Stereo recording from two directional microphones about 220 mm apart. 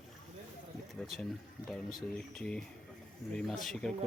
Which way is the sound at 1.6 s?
Centre (ahead or behind).